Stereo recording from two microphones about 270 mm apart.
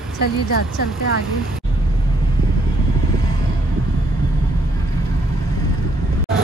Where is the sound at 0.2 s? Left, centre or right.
Left.